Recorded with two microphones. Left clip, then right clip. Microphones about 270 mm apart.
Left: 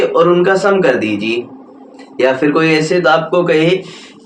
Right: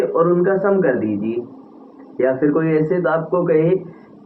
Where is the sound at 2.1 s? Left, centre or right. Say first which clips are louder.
Left 5 dB; centre.